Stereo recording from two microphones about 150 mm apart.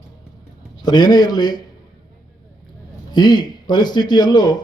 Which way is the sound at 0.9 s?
25° left (ahead or behind).